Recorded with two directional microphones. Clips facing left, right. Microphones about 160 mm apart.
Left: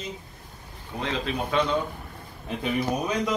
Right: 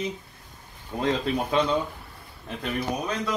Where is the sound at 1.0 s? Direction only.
40° right (ahead or behind).